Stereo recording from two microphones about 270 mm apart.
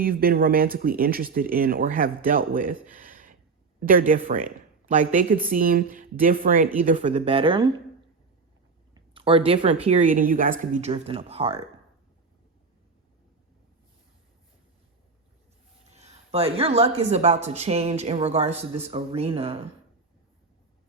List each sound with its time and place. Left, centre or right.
0.0 s speech: right
2.9 s a sound: right
3.8 s speech: right
9.0 s speech: centre
16.0 s speech: right